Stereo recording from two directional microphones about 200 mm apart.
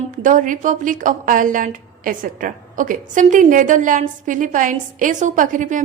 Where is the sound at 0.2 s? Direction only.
40° right (ahead or behind).